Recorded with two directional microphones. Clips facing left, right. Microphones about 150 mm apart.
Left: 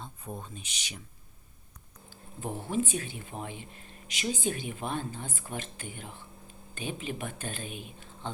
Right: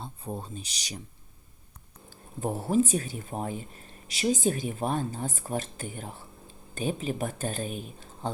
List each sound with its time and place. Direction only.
0.0 s speech: 30° right (ahead or behind)
2.0 s speech: 40° right (ahead or behind)